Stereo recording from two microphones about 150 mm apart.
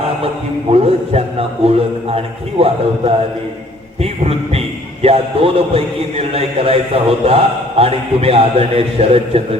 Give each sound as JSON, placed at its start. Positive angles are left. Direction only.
{"t": 0.7, "sound": "a man's voice", "side_deg": -40}
{"t": 4.0, "sound": "music", "side_deg": -40}
{"t": 5.0, "sound": "a man's voice", "side_deg": -40}